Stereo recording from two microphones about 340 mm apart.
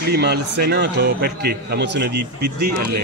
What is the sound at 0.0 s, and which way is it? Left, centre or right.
A man's voice, right.